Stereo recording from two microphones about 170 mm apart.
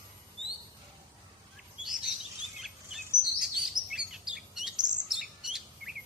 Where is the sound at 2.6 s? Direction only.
Centre (ahead or behind).